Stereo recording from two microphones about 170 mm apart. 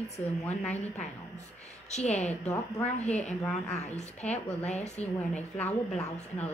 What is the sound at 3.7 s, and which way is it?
Speech, 40° left (ahead or behind).